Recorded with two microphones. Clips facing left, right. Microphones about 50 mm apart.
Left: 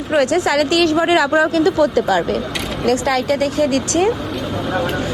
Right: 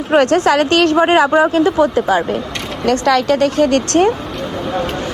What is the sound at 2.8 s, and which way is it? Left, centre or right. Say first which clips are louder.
Speech: right 3 dB; right.